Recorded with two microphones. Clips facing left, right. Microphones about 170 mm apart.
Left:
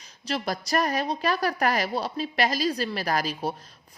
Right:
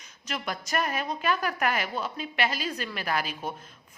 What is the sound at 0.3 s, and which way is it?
A woman's voice, 35° left (ahead or behind).